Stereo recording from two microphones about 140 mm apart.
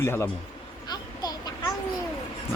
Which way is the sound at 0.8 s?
30° left (ahead or behind).